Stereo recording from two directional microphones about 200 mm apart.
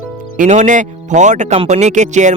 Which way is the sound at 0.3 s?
40° right (ahead or behind).